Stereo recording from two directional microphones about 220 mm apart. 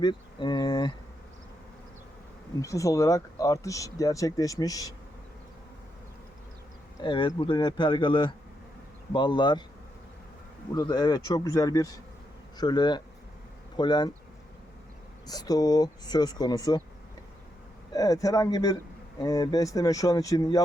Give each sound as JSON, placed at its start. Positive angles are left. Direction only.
{"t": 0.0, "sound": "speech", "side_deg": 20}
{"t": 2.6, "sound": "speech", "side_deg": 15}
{"t": 7.0, "sound": "speech", "side_deg": 20}
{"t": 10.8, "sound": "speech", "side_deg": 15}
{"t": 15.3, "sound": "speech", "side_deg": 15}
{"t": 17.9, "sound": "speech", "side_deg": 15}